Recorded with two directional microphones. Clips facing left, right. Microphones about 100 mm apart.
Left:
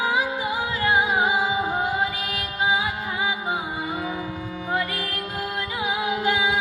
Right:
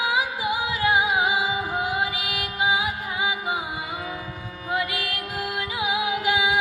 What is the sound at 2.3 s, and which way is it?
Music, 15° right (ahead or behind).